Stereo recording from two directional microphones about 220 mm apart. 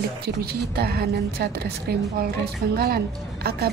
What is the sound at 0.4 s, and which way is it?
A woman's voice, 45° right (ahead or behind).